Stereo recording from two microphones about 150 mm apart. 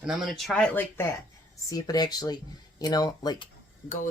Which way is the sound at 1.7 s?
25° left (ahead or behind).